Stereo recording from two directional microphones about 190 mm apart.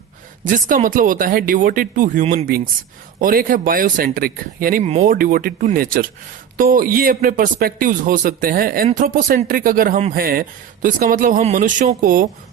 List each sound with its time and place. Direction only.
0.4 s speech: 45° right (ahead or behind)